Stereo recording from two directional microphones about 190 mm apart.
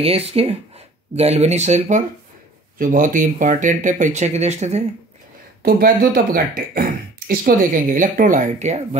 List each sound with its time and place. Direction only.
0.0 s speech: 30° right (ahead or behind)
5.6 s speech: 50° right (ahead or behind)